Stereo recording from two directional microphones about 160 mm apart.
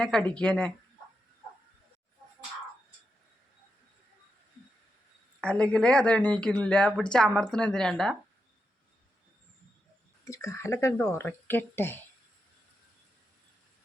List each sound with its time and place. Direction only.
0.0 s speech: 5° left (ahead or behind)
5.4 s speech: 5° left (ahead or behind)
10.2 s speech: 20° left (ahead or behind)